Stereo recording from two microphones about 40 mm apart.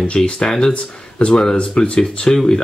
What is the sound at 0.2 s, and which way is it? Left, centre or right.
Speech, centre.